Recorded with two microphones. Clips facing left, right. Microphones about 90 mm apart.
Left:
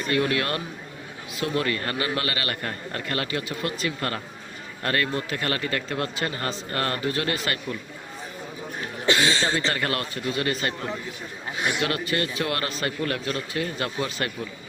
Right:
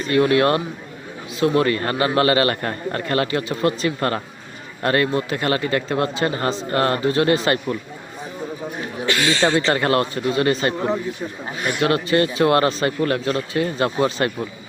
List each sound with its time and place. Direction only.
0.1 s a man's voice: 30° right (ahead or behind)
4.8 s speech: 25° right (ahead or behind)
9.0 s a woman's voice: 25° left (ahead or behind)
9.4 s a man's voice: 30° right (ahead or behind)